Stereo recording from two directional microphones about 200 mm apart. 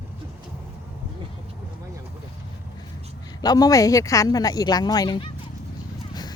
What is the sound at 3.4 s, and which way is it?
Speech, 20° left (ahead or behind).